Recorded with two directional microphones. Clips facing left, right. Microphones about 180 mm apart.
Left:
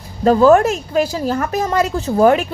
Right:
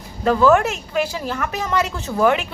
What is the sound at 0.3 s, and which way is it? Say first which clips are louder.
A woman's voice: left 5 dB; 35° left (ahead or behind).